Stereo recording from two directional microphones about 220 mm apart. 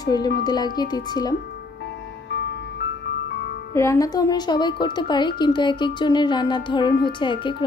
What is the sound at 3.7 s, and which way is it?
A woman's voice, 15° left (ahead or behind).